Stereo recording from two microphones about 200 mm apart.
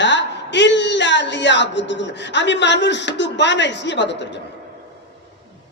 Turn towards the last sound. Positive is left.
turn(degrees=60)  # may be behind; listen again after turning